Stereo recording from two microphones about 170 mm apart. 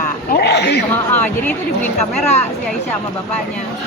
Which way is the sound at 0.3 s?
70° left (ahead or behind).